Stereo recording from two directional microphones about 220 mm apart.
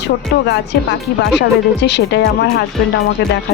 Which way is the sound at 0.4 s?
50° left (ahead or behind).